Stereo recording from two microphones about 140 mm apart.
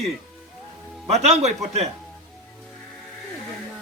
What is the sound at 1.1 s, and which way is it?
Speech, 50° right (ahead or behind).